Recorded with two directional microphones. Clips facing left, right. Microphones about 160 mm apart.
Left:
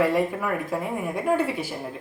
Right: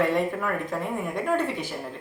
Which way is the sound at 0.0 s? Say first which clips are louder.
Left 2 dB; 10° left (ahead or behind).